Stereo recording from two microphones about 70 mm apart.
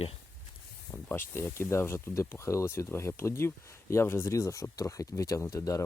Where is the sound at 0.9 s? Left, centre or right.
Left.